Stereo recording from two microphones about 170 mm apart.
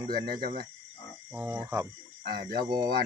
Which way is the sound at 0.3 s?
65° right (ahead or behind).